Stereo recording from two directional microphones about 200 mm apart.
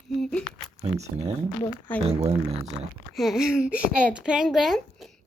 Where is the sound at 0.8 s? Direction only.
35° right (ahead or behind).